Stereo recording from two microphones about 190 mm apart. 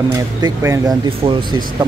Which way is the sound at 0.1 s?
15° right (ahead or behind).